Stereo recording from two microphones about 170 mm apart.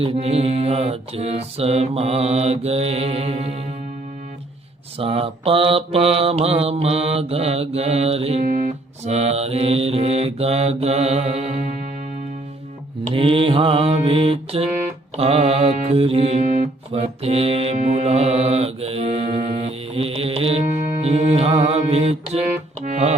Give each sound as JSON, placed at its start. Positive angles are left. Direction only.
{"t": 0.0, "sound": "mantra", "side_deg": -35}
{"t": 4.9, "sound": "mantra", "side_deg": -35}
{"t": 13.1, "sound": "mantra", "side_deg": -35}
{"t": 21.0, "sound": "music", "side_deg": -40}